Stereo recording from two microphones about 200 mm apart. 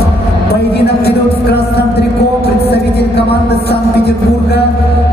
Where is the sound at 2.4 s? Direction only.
55° left (ahead or behind).